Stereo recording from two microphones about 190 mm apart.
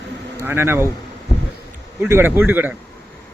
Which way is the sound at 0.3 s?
10° right (ahead or behind).